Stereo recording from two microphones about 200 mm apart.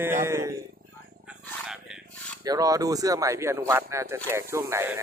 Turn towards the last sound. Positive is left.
turn(degrees=-15)  # may be behind; listen again after turning